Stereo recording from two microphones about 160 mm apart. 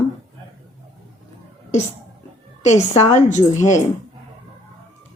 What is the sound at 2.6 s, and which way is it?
Speech, 45° left (ahead or behind).